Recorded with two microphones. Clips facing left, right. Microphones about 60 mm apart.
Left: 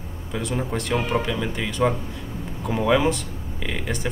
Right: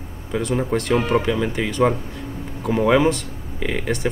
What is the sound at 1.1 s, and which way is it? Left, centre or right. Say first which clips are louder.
Speech: right 5 dB; centre.